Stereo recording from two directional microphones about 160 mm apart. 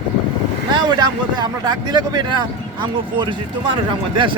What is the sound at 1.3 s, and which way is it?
Speech, 25° right (ahead or behind).